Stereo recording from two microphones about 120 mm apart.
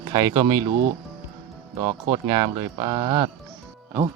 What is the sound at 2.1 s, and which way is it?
Speech, 35° right (ahead or behind).